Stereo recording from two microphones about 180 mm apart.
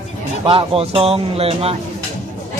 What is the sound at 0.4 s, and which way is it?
Speech, 30° right (ahead or behind).